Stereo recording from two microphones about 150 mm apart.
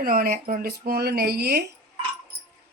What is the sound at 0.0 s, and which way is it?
Speech, 75° right (ahead or behind).